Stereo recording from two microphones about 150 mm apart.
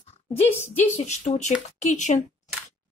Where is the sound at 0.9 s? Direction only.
50° left (ahead or behind).